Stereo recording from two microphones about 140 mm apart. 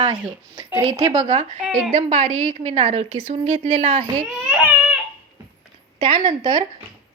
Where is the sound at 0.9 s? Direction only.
30° right (ahead or behind).